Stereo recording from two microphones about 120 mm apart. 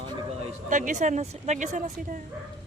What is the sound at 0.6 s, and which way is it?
Speech, 90° right.